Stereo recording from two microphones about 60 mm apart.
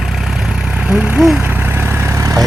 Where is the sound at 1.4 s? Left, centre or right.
Right.